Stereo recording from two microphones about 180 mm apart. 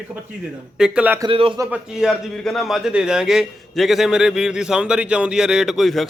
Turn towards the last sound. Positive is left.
turn(degrees=0)  # may be behind; listen again after turning